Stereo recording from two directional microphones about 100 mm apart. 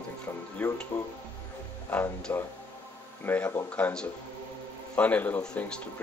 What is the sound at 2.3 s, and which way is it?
Speech, 25° left (ahead or behind).